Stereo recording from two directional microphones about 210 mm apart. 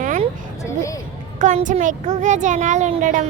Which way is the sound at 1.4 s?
35° right (ahead or behind).